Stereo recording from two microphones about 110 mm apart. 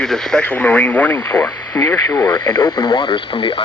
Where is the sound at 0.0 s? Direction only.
5° left (ahead or behind).